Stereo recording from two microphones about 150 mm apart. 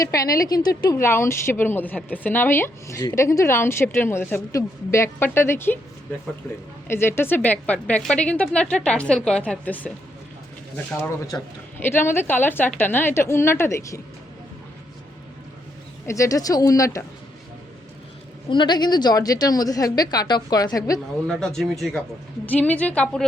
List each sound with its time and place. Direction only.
0.0 s a woman's voice: 20° left (ahead or behind)
6.8 s a woman's voice: 15° left (ahead or behind)
10.9 s a woman's voice: 15° left (ahead or behind)
16.0 s a woman's voice: 20° left (ahead or behind)
18.5 s a woman's voice: 30° left (ahead or behind)
21.2 s a woman's voice: centre (ahead or behind)